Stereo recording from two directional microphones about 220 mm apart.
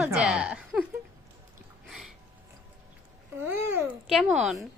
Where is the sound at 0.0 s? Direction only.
5° right (ahead or behind).